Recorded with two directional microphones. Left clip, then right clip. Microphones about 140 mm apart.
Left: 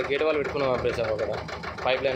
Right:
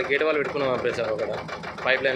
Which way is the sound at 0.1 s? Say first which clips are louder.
Right 2 dB; 5° left (ahead or behind).